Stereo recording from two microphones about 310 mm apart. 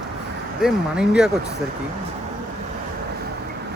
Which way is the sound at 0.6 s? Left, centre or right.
Centre.